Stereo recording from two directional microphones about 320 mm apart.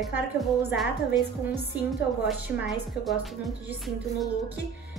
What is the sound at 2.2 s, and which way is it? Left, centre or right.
A woman's voice, centre.